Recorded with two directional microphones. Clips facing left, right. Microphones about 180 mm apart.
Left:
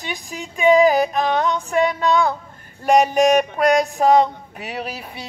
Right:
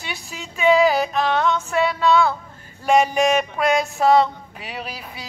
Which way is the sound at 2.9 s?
40° left (ahead or behind).